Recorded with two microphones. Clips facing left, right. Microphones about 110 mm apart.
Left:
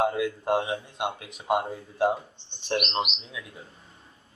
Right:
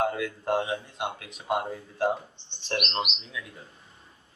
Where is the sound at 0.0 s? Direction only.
20° left (ahead or behind).